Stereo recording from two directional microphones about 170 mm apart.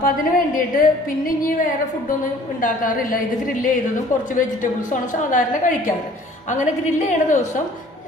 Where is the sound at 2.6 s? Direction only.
55° left (ahead or behind).